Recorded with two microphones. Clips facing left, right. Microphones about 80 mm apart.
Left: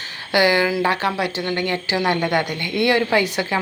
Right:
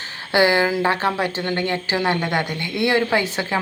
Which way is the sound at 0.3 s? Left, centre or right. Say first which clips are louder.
Even; right.